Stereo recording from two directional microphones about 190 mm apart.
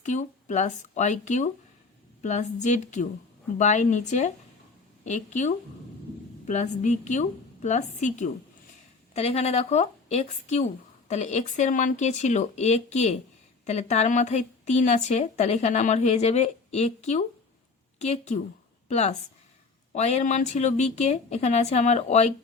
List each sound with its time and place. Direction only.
0.0 s a woman's voice: 40° left (ahead or behind)